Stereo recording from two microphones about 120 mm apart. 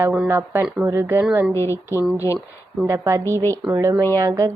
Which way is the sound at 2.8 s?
25° right (ahead or behind).